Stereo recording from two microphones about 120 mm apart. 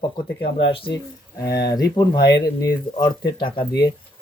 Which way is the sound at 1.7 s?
35° left (ahead or behind).